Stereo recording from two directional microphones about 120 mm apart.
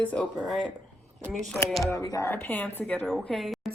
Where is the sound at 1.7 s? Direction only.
Centre (ahead or behind).